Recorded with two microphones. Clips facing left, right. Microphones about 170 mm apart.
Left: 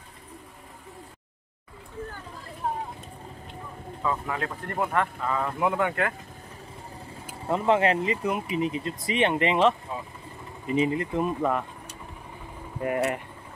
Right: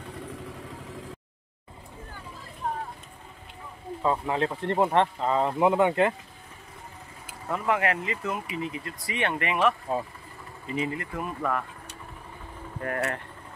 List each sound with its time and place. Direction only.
4.0 s speech: 25° right (ahead or behind)
7.4 s speech: 25° left (ahead or behind)
12.8 s speech: 15° left (ahead or behind)